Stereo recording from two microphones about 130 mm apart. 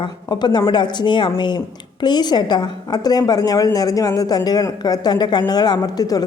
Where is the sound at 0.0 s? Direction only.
35° left (ahead or behind).